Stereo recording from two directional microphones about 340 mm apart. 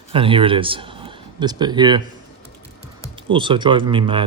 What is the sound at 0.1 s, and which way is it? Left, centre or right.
Speech, centre.